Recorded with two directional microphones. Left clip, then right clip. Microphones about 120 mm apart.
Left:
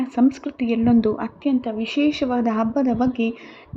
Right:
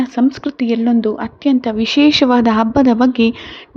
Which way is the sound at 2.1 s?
55° right (ahead or behind).